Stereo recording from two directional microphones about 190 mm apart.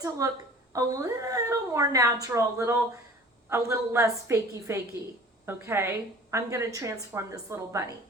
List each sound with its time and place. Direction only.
0.2 s a woman's voice: 15° right (ahead or behind)